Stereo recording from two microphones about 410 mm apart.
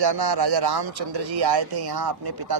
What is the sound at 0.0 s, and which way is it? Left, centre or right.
Speech, right.